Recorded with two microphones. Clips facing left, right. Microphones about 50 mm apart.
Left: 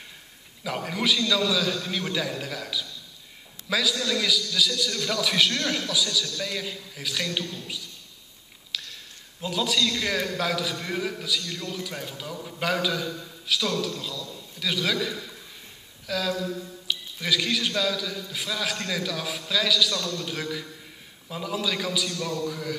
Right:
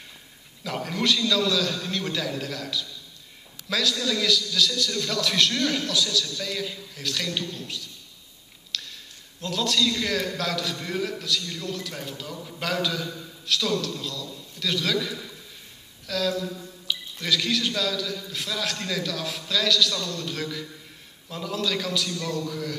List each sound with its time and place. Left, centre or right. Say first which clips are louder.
0.7 s a man's voice: even; centre
8.7 s a sound: even; centre
9.4 s a man's voice: right 1 dB; centre